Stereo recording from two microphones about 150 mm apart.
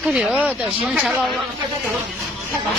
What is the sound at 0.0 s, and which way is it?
Speech, 5° right (ahead or behind).